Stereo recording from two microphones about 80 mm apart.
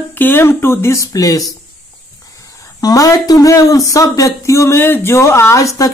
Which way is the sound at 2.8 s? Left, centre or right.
Left.